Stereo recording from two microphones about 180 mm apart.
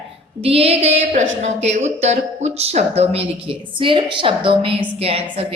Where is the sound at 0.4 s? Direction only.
35° right (ahead or behind).